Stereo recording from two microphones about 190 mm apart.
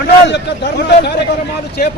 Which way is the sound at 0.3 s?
65° left (ahead or behind).